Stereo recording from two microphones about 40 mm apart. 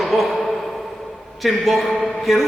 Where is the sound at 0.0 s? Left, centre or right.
Centre.